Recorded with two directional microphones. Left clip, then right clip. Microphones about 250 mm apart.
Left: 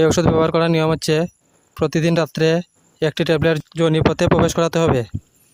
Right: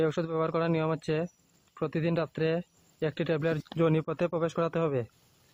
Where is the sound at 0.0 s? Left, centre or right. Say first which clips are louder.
Left 13 dB; left.